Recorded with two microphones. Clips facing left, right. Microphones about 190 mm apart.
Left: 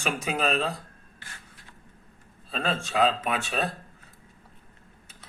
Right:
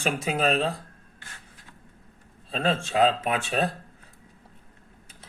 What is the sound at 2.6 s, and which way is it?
Speech, 30° right (ahead or behind).